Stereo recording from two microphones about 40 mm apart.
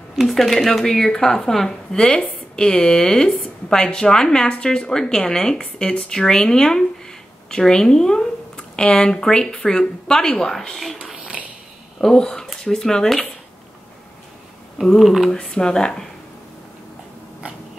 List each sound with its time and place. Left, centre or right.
0.3 s a woman's voice: centre
12.0 s a woman's voice: centre
15.0 s speech: centre
15.5 s a woman's voice: centre